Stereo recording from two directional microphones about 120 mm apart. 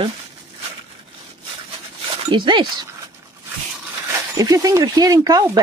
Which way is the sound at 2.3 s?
40° right (ahead or behind).